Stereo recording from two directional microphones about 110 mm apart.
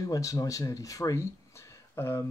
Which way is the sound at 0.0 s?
30° left (ahead or behind).